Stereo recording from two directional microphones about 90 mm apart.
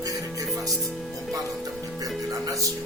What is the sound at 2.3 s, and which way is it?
Speech, 40° right (ahead or behind).